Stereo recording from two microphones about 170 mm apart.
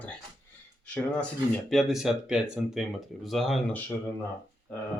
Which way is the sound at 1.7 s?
Centre (ahead or behind).